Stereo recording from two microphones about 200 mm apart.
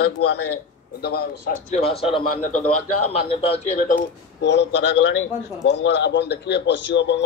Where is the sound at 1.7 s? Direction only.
30° left (ahead or behind).